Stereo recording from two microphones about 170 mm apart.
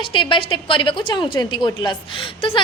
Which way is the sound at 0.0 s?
30° left (ahead or behind).